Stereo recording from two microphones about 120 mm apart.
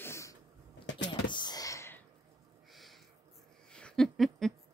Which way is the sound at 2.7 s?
Centre (ahead or behind).